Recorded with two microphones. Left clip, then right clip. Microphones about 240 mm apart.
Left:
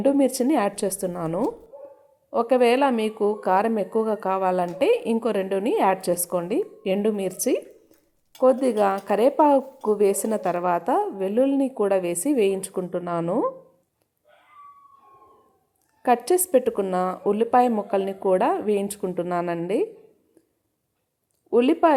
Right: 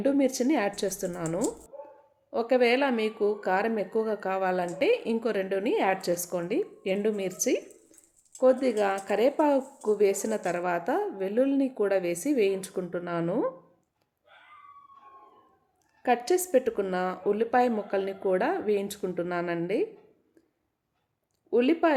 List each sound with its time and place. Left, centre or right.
0.0 s speech: centre
16.0 s speech: centre
21.5 s speech: centre